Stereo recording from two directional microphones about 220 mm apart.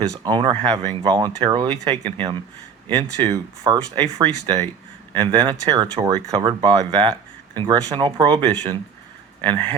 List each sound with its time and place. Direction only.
0.1 s speech: 20° right (ahead or behind)
3.3 s speech: 15° right (ahead or behind)